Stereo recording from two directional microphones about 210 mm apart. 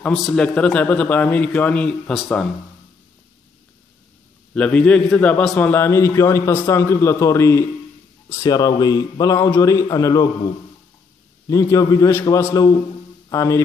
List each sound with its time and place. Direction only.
0.0 s a man's voice: centre (ahead or behind)
4.6 s a man's voice: 5° left (ahead or behind)
11.4 s a man's voice: 15° left (ahead or behind)